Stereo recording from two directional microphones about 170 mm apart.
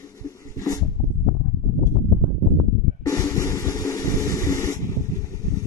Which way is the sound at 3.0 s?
20° left (ahead or behind).